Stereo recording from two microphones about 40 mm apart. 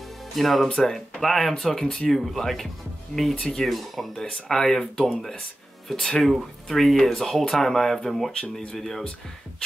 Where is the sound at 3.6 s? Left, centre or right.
Centre.